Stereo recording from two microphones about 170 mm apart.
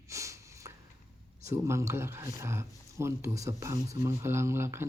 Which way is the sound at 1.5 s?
15° right (ahead or behind).